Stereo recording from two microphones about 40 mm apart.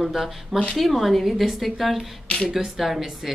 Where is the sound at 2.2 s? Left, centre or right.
Left.